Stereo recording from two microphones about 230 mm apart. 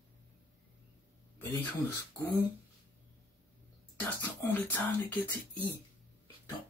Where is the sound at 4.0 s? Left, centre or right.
Centre.